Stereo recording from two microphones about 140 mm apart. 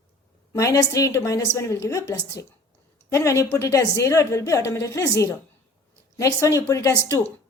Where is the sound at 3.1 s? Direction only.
20° left (ahead or behind).